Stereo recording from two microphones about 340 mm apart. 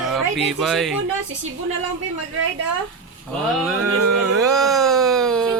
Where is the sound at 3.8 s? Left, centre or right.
Right.